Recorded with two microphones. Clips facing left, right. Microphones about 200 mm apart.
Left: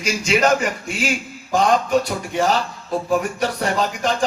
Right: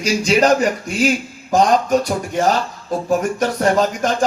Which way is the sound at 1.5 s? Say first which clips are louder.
Right 3 dB; 45° right (ahead or behind).